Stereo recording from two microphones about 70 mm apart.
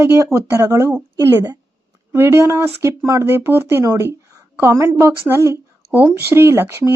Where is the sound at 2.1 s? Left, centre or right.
Right.